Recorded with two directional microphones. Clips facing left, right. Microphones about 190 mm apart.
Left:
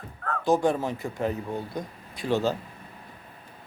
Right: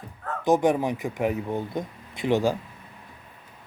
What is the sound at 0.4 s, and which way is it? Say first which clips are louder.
Speech: right 2 dB; 20° right (ahead or behind).